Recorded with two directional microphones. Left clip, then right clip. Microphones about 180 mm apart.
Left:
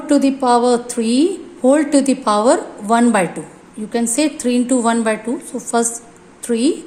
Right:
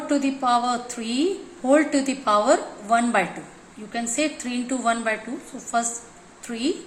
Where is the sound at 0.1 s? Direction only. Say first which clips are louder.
Left 8 dB; 75° left (ahead or behind).